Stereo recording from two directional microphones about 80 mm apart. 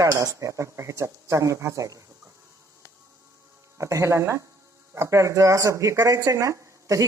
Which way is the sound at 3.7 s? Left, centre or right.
Right.